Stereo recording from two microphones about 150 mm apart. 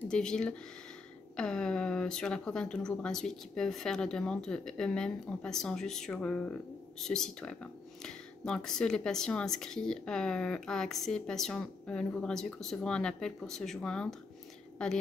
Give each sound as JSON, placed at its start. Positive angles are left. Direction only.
{"t": 0.1, "sound": "speech", "side_deg": 5}